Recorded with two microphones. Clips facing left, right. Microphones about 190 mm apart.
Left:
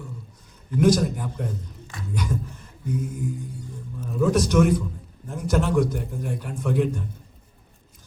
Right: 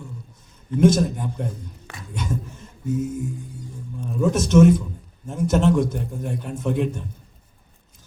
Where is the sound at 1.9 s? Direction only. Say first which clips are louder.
Left 4 dB; 65° right (ahead or behind).